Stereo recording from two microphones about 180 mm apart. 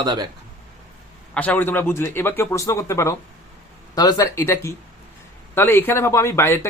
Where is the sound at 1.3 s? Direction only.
10° left (ahead or behind).